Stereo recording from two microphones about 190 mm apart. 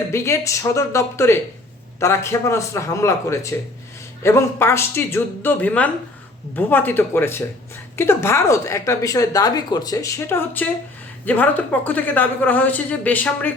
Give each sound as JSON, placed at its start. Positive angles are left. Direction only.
{"t": 0.1, "sound": "a woman's voice", "side_deg": 15}